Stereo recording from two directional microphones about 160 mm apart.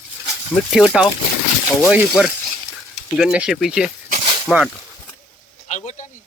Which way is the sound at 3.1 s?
5° right (ahead or behind).